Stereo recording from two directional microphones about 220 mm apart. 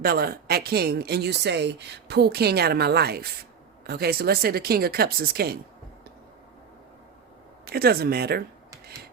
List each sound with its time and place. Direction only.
0.0 s a woman's voice: 45° right (ahead or behind)
7.7 s a woman's voice: 45° right (ahead or behind)